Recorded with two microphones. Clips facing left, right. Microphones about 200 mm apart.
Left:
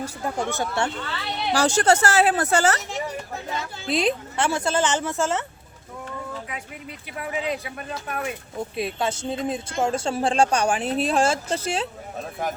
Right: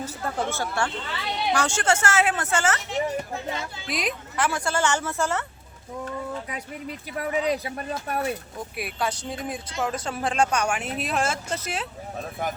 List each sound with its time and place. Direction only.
0.0 s speech: 15° left (ahead or behind)
1.5 s a woman's voice: 35° left (ahead or behind)
3.8 s speech: 30° left (ahead or behind)
7.2 s speech: 40° right (ahead or behind)
8.5 s speech: 25° left (ahead or behind)